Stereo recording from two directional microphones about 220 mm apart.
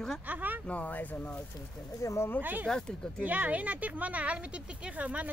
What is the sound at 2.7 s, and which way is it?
Speech, 5° left (ahead or behind).